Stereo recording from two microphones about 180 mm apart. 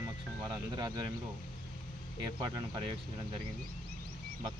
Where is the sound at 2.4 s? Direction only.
25° right (ahead or behind).